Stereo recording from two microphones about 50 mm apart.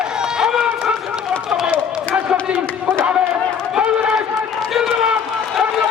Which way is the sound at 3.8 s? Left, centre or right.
Centre.